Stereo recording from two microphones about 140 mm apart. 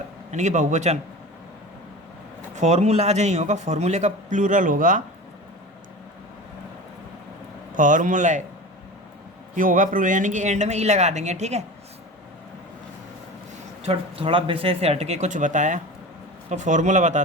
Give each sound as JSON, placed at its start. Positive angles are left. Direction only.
{"t": 0.3, "sound": "a man's voice", "side_deg": -60}
{"t": 2.6, "sound": "a man's voice", "side_deg": -55}
{"t": 7.8, "sound": "a man's voice", "side_deg": -65}
{"t": 9.6, "sound": "a man's voice", "side_deg": -70}
{"t": 13.8, "sound": "a man's voice", "side_deg": -40}